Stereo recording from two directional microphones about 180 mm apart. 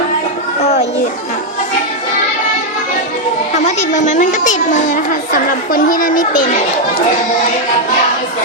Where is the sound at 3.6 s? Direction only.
40° left (ahead or behind).